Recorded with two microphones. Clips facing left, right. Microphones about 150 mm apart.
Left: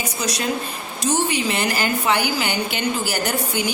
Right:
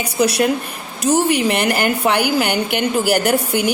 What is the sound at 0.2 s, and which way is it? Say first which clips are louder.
A woman's voice: right 9 dB; 60° right (ahead or behind).